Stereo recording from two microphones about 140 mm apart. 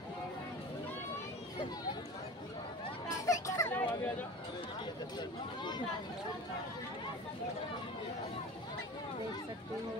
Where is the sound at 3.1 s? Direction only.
25° left (ahead or behind).